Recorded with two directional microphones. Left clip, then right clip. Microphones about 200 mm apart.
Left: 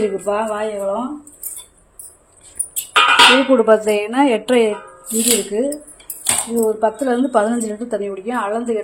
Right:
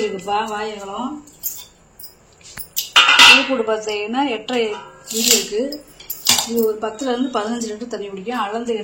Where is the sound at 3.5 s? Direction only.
55° left (ahead or behind).